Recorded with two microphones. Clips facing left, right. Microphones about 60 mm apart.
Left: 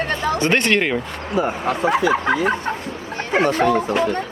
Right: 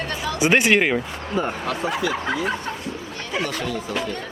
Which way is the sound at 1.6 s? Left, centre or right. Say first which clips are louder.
Left 6 dB; left.